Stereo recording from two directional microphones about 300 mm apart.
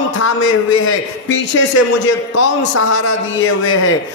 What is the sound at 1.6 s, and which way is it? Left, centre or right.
A man's voice, left.